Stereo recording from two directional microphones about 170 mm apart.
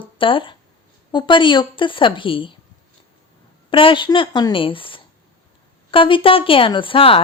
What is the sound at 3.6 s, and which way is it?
Speech, 30° left (ahead or behind).